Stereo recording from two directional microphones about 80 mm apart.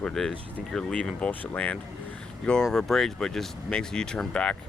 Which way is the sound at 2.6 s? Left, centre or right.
Centre.